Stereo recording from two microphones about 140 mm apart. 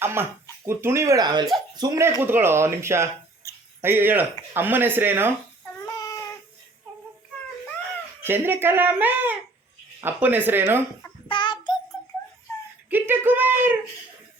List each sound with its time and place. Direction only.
0.0 s a sound: 15° right (ahead or behind)
0.6 s speech: 15° right (ahead or behind)
5.8 s child singing: 25° left (ahead or behind)
8.2 s speech: 15° right (ahead or behind)
11.3 s child singing: 35° left (ahead or behind)
12.9 s speech: 15° right (ahead or behind)